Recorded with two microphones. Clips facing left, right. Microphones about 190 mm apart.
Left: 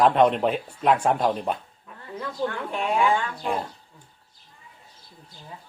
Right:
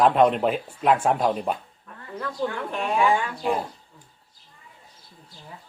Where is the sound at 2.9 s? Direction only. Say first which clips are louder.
Right 2 dB; 10° right (ahead or behind).